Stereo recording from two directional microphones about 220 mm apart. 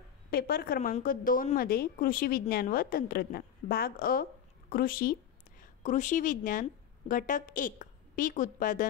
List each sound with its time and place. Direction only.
0.3 s a woman's voice: 45° left (ahead or behind)